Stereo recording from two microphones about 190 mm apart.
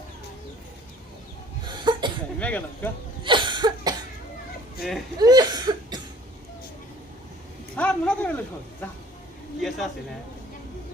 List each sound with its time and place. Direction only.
1.6 s sneeze: 25° right (ahead or behind)
2.4 s speech: 10° left (ahead or behind)
3.2 s cough: 25° right (ahead or behind)
4.8 s speech: centre (ahead or behind)
5.2 s cough: 20° right (ahead or behind)
7.8 s speech: 5° left (ahead or behind)
9.6 s speech: centre (ahead or behind)